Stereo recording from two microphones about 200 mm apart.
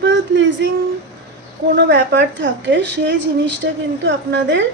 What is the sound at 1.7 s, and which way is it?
Speech, 60° right (ahead or behind).